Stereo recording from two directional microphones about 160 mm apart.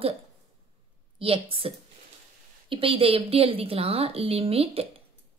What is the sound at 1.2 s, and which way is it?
Speech, 35° right (ahead or behind).